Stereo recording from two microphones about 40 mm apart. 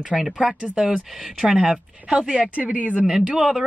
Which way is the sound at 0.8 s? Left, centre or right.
Centre.